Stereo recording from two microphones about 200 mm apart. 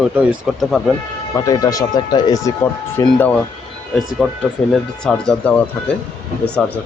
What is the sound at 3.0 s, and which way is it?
Speech, 10° left (ahead or behind).